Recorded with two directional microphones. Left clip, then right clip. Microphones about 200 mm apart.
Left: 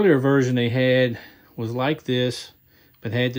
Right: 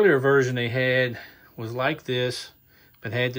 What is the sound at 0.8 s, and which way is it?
Speech, 30° left (ahead or behind).